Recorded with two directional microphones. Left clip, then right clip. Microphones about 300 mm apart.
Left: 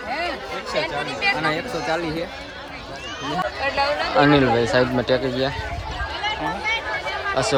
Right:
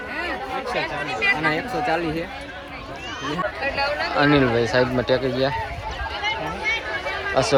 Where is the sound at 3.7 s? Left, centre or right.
Left.